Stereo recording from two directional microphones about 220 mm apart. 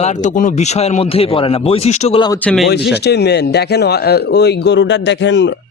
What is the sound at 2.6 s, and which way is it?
A man's voice, 50° left (ahead or behind).